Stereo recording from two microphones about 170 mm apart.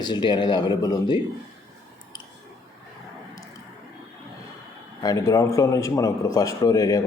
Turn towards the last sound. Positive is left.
turn(degrees=20)  # may be behind; listen again after turning